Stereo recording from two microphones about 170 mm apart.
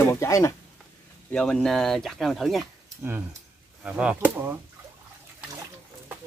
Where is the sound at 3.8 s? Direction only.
5° right (ahead or behind).